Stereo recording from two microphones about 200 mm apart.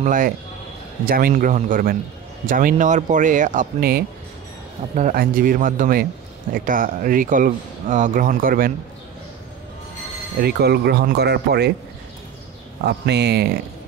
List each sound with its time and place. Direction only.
0.0 s speech: 40° right (ahead or behind)
10.4 s speech: 55° right (ahead or behind)
12.8 s speech: 55° right (ahead or behind)